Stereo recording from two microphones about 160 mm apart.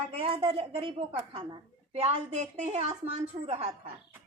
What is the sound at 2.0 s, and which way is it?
A woman's voice, 40° right (ahead or behind).